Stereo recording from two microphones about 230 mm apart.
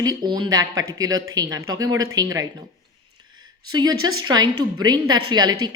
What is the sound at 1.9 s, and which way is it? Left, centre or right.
Speech, right.